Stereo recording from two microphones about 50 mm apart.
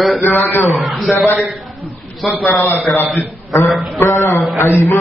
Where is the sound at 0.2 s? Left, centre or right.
Left.